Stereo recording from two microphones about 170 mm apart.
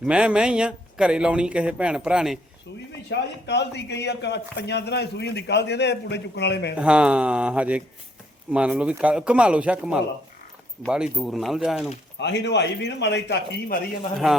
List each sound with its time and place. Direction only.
0.0 s speech: 5° right (ahead or behind)
3.1 s a man's voice: 90° left
6.7 s speech: 5° right (ahead or behind)
12.2 s speech: 90° left
14.2 s speech: 5° right (ahead or behind)